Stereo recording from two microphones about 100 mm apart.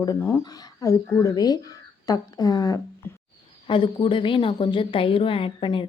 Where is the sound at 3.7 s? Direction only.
55° left (ahead or behind).